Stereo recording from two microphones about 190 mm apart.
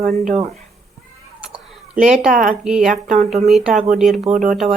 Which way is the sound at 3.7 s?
40° right (ahead or behind).